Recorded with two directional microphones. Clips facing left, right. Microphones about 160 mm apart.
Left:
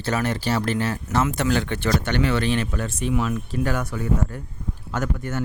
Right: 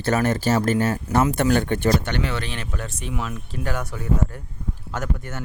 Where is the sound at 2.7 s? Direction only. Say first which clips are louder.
Left 4 dB; centre (ahead or behind).